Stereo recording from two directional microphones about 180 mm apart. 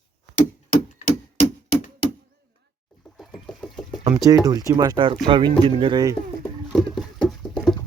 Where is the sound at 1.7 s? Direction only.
35° left (ahead or behind).